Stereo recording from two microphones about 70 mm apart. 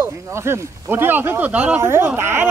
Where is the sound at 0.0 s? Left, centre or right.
Right.